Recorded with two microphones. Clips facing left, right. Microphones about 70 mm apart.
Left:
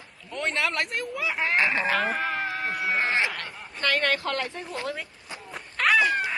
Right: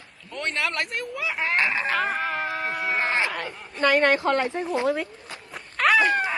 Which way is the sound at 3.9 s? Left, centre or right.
Right.